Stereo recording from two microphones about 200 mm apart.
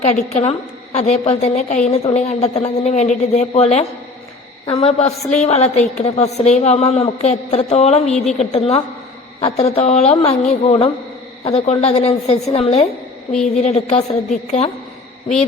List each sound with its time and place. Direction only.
0.0 s a woman's voice: 30° left (ahead or behind)